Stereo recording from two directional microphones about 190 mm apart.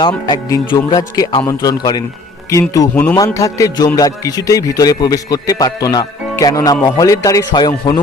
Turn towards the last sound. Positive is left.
turn(degrees=20)  # may be behind; listen again after turning